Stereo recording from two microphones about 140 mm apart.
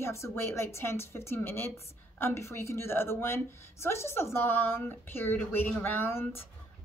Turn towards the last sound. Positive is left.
turn(degrees=15)  # may be behind; listen again after turning